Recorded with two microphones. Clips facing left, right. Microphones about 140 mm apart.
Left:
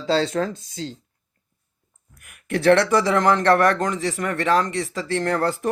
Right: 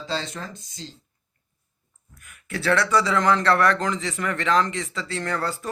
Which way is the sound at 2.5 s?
50° left (ahead or behind).